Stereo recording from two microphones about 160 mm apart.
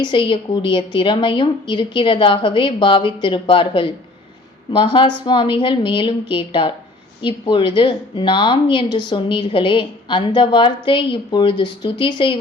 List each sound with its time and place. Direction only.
0.0 s a woman's voice: 30° left (ahead or behind)